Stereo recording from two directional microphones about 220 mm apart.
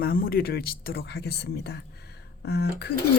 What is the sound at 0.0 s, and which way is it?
Speech, 40° left (ahead or behind).